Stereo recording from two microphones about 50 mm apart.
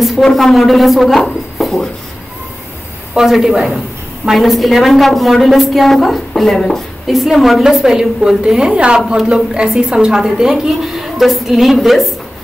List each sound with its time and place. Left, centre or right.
0.2 s speech: centre
3.2 s a woman's voice: centre
7.6 s a woman's voice: centre